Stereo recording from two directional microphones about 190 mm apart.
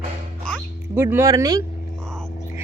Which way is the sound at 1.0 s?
15° right (ahead or behind).